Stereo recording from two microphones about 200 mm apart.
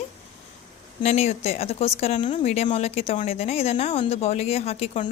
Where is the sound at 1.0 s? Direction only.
30° left (ahead or behind).